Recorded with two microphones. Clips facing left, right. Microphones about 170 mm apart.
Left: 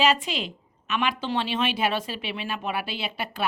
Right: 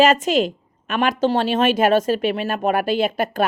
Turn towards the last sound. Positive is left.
turn(degrees=-45)  # may be behind; listen again after turning